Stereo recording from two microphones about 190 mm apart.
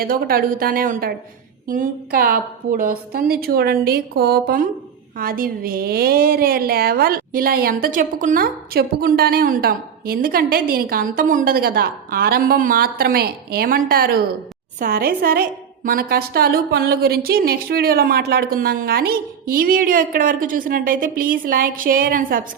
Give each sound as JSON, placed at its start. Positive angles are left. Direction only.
{"t": 0.0, "sound": "a woman's voice", "side_deg": -50}